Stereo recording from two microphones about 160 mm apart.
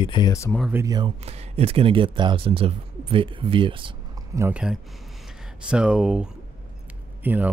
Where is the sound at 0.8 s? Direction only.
25° right (ahead or behind).